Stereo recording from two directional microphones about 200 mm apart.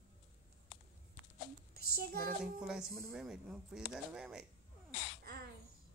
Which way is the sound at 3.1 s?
Centre (ahead or behind).